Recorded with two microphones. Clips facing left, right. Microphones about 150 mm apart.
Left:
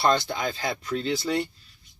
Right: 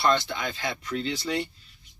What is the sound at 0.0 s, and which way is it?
Speech, 40° left (ahead or behind).